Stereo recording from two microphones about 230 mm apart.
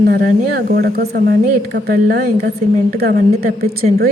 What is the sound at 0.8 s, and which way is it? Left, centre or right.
A woman's voice, right.